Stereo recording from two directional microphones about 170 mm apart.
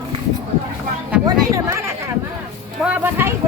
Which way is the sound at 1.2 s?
20° right (ahead or behind).